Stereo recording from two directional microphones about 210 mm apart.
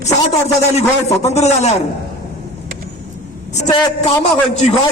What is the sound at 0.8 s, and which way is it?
Speech, 30° left (ahead or behind).